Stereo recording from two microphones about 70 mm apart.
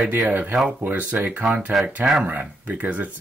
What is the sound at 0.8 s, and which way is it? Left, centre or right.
Speech, right.